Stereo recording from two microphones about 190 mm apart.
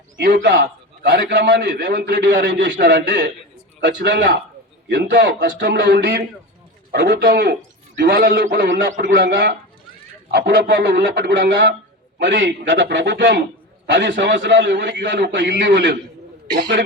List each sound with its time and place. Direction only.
0.2 s a man's voice: 50° right (ahead or behind)
0.4 s a man's voice: 65° right (ahead or behind)
3.8 s a man's voice: 75° right (ahead or behind)
8.6 s a man's voice: 75° right (ahead or behind)
8.9 s a man's voice: 45° right (ahead or behind)
9.1 s a man's voice: 75° right (ahead or behind)